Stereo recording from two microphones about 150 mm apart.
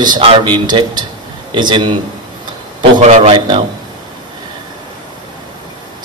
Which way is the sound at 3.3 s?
30° right (ahead or behind).